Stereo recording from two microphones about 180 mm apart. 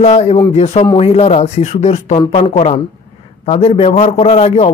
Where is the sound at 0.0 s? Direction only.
35° left (ahead or behind).